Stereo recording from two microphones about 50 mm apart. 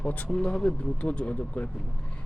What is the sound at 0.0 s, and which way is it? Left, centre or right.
Speech, left.